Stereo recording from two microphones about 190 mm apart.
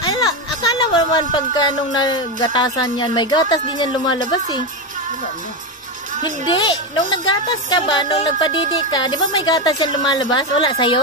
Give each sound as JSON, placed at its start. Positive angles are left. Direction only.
{"t": 0.0, "sound": "speech", "side_deg": 20}
{"t": 6.5, "sound": "speech", "side_deg": 25}